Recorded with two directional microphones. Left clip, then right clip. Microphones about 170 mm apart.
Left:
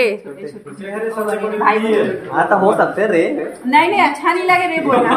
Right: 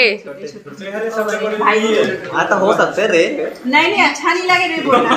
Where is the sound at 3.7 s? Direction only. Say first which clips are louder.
Even; 5° left (ahead or behind).